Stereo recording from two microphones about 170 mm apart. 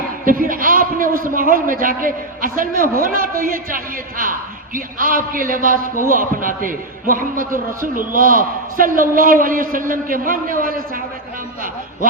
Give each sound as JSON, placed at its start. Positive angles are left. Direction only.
{"t": 0.3, "sound": "a man's voice", "side_deg": -55}